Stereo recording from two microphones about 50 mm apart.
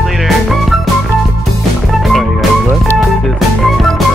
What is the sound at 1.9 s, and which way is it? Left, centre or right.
Music, centre.